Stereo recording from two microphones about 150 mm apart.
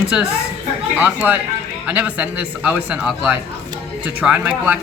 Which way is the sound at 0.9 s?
10° right (ahead or behind).